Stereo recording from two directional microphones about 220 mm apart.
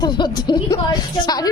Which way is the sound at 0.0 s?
20° left (ahead or behind).